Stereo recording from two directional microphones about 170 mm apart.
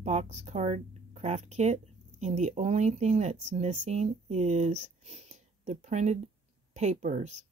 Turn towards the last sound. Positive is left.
turn(degrees=-40)  # may be behind; listen again after turning